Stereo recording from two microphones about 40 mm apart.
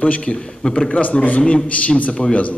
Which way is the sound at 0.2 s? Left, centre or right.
Left.